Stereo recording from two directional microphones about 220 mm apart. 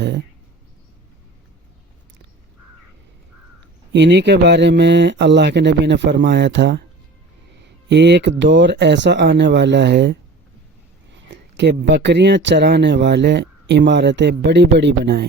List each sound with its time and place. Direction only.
3.9 s speech: 50° right (ahead or behind)
7.9 s speech: 50° right (ahead or behind)